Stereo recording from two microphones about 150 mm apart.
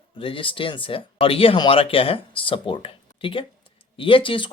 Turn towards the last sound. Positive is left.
turn(degrees=35)  # may be behind; listen again after turning